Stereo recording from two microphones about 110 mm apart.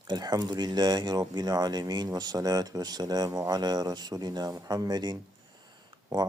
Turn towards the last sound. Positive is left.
turn(degrees=-40)  # may be behind; listen again after turning